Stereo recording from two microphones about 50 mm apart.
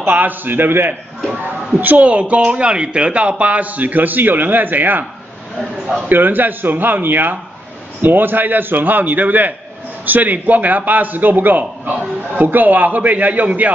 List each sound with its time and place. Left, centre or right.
0.0 s speech: right
1.8 s speech: right
5.6 s a man's voice: centre
6.0 s speech: right